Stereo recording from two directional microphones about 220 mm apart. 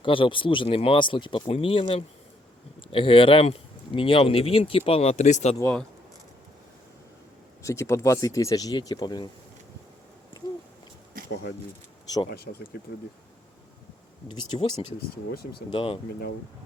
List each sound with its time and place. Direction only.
0.0 s speech: 20° left (ahead or behind)
5.5 s speech: 10° left (ahead or behind)
7.6 s speech: 15° left (ahead or behind)
12.0 s speech: 15° left (ahead or behind)
12.3 s speech: 45° left (ahead or behind)
14.3 s speech: 25° left (ahead or behind)
14.9 s speech: 45° left (ahead or behind)
15.7 s speech: 25° left (ahead or behind)